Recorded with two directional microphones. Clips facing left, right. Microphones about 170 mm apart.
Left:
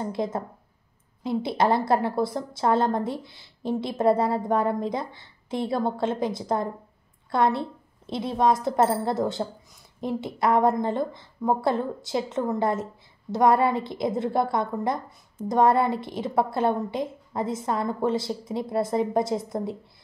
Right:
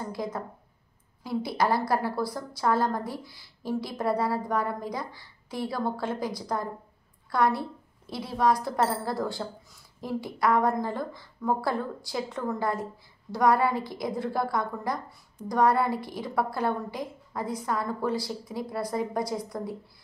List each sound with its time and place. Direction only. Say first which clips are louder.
0.0 s a woman's voice: left 5 dB; 25° left (ahead or behind)